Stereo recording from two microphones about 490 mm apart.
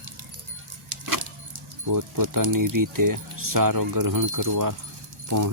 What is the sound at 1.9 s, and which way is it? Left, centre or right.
Speech, right.